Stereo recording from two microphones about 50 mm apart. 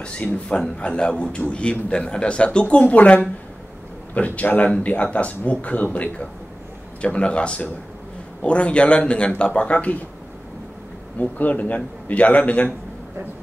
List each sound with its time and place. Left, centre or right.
0.7 s a man's voice: left
11.1 s a man's voice: left